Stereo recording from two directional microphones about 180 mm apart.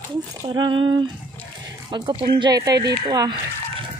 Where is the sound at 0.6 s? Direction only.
25° right (ahead or behind).